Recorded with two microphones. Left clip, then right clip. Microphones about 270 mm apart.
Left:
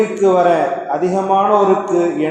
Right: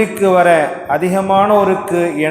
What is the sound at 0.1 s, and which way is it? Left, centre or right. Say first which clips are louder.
A man's voice: right 2 dB; right.